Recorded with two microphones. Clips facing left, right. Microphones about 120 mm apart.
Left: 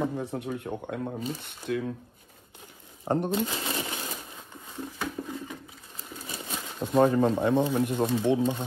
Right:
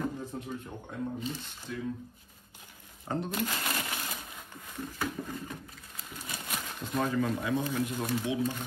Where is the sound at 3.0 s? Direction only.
55° left (ahead or behind).